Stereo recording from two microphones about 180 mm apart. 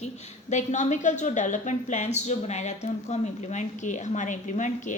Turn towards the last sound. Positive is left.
turn(degrees=45)  # may be behind; listen again after turning